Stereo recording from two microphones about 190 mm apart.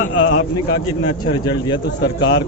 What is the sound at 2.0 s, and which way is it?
Speech, 60° left (ahead or behind).